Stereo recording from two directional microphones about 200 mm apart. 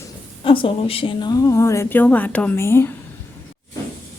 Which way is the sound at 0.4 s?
25° left (ahead or behind).